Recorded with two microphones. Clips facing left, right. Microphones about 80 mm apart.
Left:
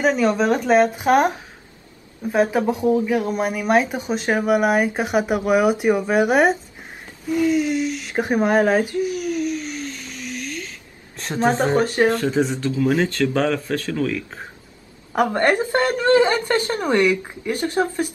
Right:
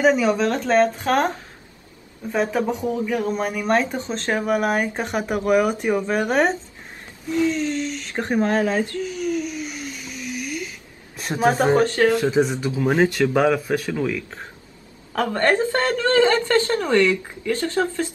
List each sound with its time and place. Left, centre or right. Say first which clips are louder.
0.0 s speech: even; centre
0.5 s speech: left 2 dB; centre
14.1 s speech: left 2 dB; centre
15.1 s speech: left 2 dB; centre